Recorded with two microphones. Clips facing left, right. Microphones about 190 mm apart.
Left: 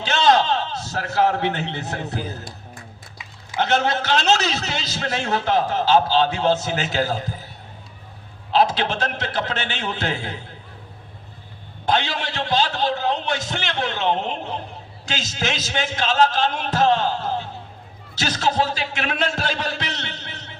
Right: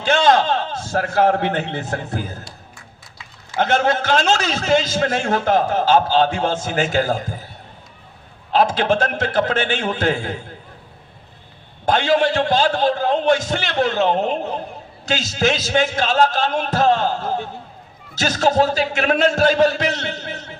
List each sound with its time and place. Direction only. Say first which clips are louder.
0.0 s a man's voice: right 2 dB; 50° right (ahead or behind)
3.6 s a man's voice: right 3 dB; 50° right (ahead or behind)
8.5 s a man's voice: right 3 dB; 50° right (ahead or behind)
11.9 s a man's voice: right 7 dB; 50° right (ahead or behind)